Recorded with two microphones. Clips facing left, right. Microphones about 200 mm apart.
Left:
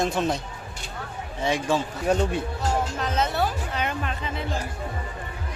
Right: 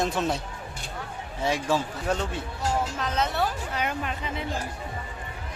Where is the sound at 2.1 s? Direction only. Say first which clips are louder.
Left 6 dB; 15° left (ahead or behind).